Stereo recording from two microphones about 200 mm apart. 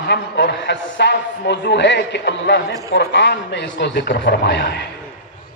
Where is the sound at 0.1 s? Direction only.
55° left (ahead or behind).